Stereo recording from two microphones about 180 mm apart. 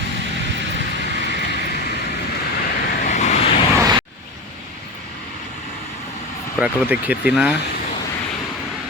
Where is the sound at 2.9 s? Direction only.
45° left (ahead or behind).